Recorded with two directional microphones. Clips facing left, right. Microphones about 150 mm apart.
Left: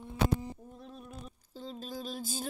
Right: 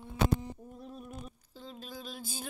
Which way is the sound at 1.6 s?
40° left (ahead or behind).